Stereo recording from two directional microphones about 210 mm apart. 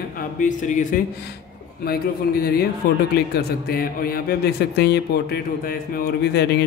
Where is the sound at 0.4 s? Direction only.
35° left (ahead or behind).